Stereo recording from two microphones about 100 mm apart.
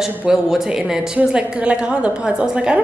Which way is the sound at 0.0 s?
5° right (ahead or behind).